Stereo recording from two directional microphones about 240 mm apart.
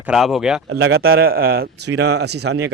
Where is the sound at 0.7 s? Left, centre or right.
Right.